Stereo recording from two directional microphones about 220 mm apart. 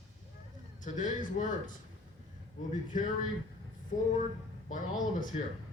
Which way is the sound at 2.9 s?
35° left (ahead or behind).